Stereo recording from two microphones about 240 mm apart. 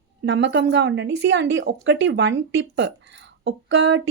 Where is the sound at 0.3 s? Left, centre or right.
Right.